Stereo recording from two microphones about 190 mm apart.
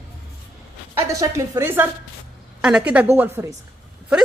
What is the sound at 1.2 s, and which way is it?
A woman's voice, 15° right (ahead or behind).